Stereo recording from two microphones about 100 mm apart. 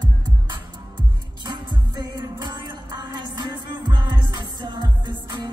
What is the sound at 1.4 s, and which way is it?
Music, 50° right (ahead or behind).